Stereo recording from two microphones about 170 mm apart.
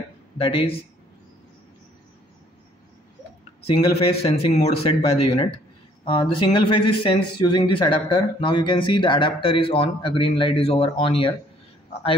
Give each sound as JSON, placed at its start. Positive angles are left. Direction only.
{"t": 0.4, "sound": "speech", "side_deg": 35}
{"t": 3.6, "sound": "a man's voice", "side_deg": 35}